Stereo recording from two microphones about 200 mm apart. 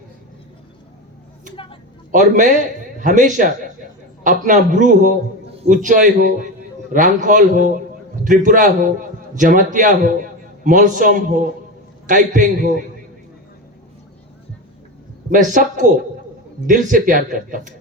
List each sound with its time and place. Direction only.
2.1 s a man's voice: 40° right (ahead or behind)
15.3 s a man's voice: 40° right (ahead or behind)